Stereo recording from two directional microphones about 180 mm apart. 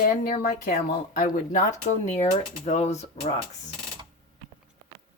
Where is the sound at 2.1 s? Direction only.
35° left (ahead or behind).